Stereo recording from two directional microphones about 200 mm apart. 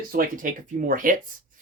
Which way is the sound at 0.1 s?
45° right (ahead or behind).